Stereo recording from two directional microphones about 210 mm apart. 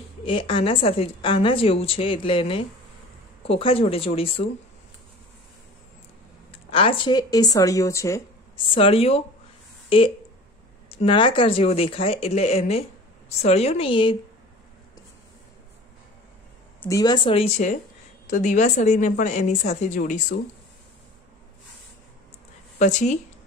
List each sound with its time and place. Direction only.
0.2 s a woman's voice: 25° left (ahead or behind)
6.7 s a woman's voice: 25° left (ahead or behind)
8.7 s a woman's voice: 25° left (ahead or behind)
16.9 s a woman's voice: 20° left (ahead or behind); by 20.3 s 40° left (ahead or behind)
22.8 s a woman's voice: 35° left (ahead or behind)